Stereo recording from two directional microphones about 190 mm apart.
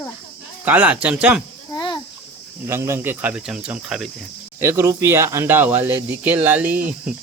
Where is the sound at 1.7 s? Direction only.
25° left (ahead or behind).